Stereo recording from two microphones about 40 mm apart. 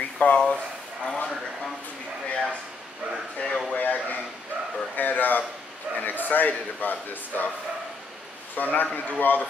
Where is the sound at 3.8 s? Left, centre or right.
Left.